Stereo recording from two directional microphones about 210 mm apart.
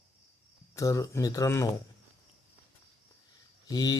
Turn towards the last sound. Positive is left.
turn(degrees=20)  # may be behind; listen again after turning